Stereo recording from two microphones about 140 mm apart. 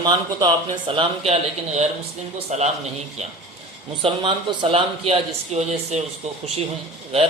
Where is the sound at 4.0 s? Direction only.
40° right (ahead or behind).